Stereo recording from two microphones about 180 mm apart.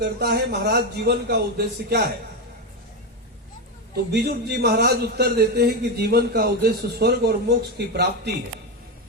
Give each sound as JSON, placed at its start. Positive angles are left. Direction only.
{"t": 0.0, "sound": "speech", "side_deg": -60}
{"t": 4.1, "sound": "speech", "side_deg": -65}